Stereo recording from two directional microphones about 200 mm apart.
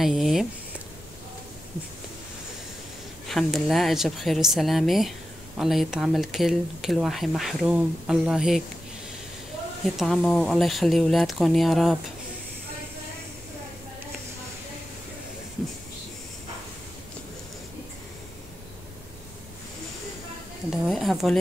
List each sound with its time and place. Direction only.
0.0 s a sound: centre (ahead or behind)
3.3 s speech: centre (ahead or behind)
9.9 s speech: centre (ahead or behind)
20.7 s speech: centre (ahead or behind)